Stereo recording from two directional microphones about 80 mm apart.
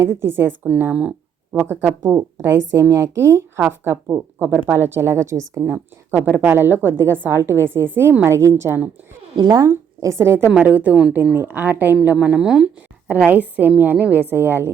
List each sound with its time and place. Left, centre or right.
0.0 s a woman's voice: right
1.5 s a woman's voice: right
5.7 s a woman's voice: right
9.4 s speech: right
9.6 s a woman's voice: right
10.6 s a woman's voice: centre